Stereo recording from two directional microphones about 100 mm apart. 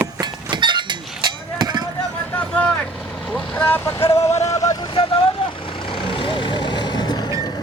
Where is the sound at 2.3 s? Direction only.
15° left (ahead or behind).